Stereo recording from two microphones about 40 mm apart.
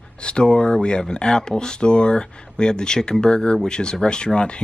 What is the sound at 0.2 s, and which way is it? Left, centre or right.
Speech, left.